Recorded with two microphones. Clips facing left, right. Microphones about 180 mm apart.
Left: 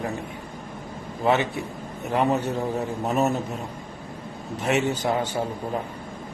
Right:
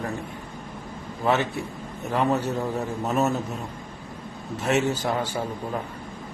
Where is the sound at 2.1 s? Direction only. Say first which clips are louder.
Left 1 dB; 15° left (ahead or behind).